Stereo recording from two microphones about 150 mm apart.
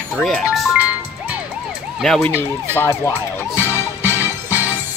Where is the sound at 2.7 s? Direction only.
20° left (ahead or behind).